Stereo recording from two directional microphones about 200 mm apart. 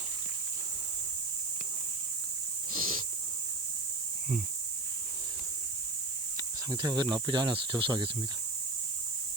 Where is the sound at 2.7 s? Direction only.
45° right (ahead or behind).